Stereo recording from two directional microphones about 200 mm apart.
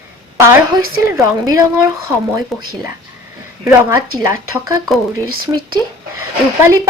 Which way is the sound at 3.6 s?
15° right (ahead or behind).